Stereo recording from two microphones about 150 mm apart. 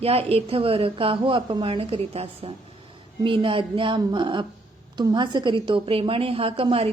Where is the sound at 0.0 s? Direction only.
40° right (ahead or behind).